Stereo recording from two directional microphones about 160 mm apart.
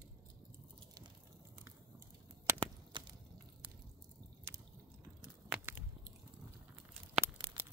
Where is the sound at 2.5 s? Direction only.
30° right (ahead or behind).